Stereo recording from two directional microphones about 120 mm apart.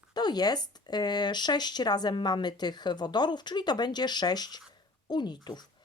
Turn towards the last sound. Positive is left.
turn(degrees=35)  # may be behind; listen again after turning